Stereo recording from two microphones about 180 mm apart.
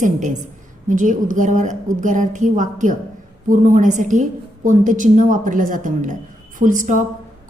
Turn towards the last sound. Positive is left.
turn(degrees=-45)  # may be behind; listen again after turning